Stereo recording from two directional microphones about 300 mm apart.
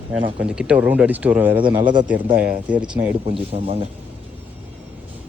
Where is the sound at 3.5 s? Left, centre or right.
Centre.